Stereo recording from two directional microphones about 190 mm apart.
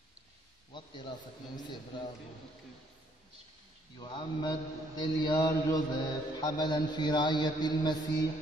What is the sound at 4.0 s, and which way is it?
A man's voice, 25° left (ahead or behind).